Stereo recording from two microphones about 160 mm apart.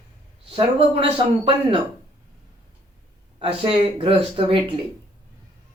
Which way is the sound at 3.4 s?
35° right (ahead or behind).